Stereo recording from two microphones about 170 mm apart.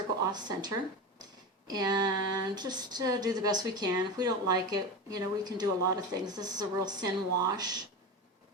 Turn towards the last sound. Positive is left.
turn(degrees=-25)  # may be behind; listen again after turning